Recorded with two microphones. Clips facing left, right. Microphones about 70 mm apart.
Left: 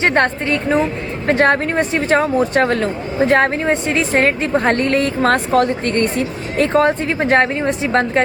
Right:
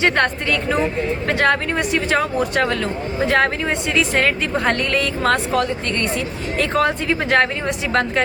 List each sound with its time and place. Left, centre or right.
0.0 s a woman's voice: left